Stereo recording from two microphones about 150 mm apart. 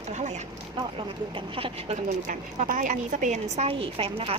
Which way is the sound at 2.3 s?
65° right (ahead or behind).